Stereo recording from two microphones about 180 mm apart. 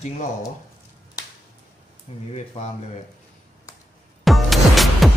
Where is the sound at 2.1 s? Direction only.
35° left (ahead or behind).